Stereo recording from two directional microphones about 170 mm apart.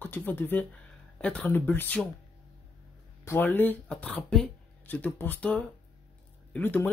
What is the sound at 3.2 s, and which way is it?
Speech, 10° left (ahead or behind).